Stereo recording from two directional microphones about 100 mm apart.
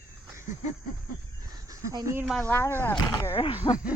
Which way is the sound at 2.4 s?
20° left (ahead or behind).